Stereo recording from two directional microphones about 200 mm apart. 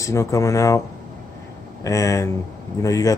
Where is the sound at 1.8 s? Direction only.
15° left (ahead or behind).